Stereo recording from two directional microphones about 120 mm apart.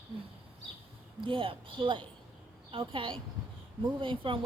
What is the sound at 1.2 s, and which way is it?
Speech, 45° right (ahead or behind).